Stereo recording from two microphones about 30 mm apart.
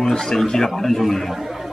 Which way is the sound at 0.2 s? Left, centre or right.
Centre.